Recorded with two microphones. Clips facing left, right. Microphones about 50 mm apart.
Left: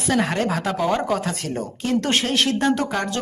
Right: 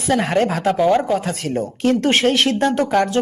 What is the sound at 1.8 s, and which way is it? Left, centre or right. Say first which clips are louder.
A man's voice: right 6 dB; right.